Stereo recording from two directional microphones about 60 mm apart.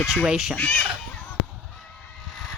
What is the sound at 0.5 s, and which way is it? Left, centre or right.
Speech, left.